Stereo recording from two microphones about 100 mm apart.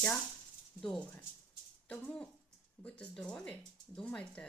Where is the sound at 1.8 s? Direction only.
10° left (ahead or behind).